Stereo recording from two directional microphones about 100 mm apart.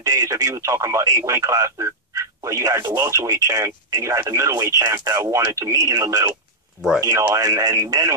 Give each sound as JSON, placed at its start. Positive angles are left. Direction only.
{"t": 0.0, "sound": "speech", "side_deg": -35}